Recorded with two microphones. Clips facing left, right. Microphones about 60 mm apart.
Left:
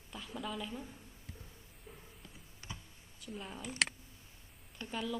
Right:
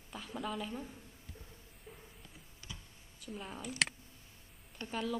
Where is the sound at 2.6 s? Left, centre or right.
Left.